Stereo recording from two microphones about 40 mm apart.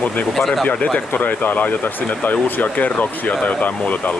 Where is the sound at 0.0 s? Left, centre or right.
Left.